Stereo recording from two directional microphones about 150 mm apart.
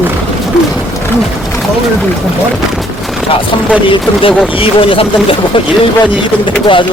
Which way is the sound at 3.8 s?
35° left (ahead or behind).